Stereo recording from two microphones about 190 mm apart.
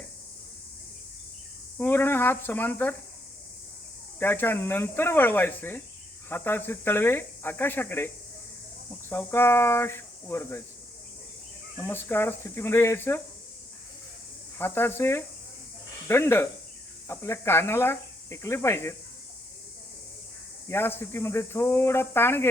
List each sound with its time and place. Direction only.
1.8 s speech: 10° left (ahead or behind)
4.2 s speech: 10° left (ahead or behind)
11.8 s speech: 10° left (ahead or behind)
14.6 s speech: 10° left (ahead or behind)
20.7 s speech: 10° left (ahead or behind)